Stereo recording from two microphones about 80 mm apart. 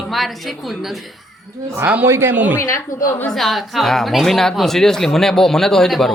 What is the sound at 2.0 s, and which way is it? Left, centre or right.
Speech, right.